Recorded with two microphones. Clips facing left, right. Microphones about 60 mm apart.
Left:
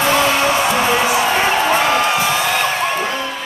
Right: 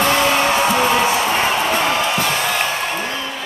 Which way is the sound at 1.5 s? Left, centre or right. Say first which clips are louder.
Left 3 dB; left.